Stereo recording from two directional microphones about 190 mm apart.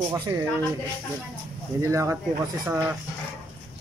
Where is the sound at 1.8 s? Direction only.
15° right (ahead or behind).